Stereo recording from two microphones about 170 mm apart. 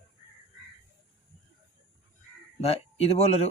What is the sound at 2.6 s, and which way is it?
Speech, 35° left (ahead or behind).